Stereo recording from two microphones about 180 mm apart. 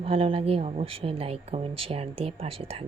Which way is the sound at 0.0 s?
30° right (ahead or behind).